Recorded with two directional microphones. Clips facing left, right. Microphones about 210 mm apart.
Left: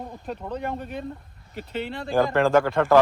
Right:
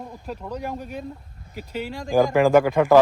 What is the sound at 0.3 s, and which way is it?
Speech, 5° right (ahead or behind).